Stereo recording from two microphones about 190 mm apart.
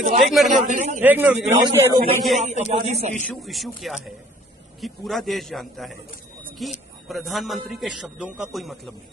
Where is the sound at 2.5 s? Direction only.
35° right (ahead or behind).